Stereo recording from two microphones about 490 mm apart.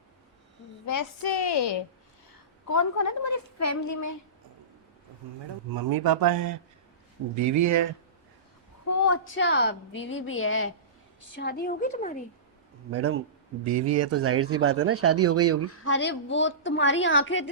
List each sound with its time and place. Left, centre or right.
0.9 s a woman's voice: left
2.6 s a woman's voice: left
5.7 s speech: right
8.9 s a woman's voice: left
12.9 s speech: right
15.7 s a woman's voice: left